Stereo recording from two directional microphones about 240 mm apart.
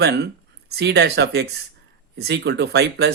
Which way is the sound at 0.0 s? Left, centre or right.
Right.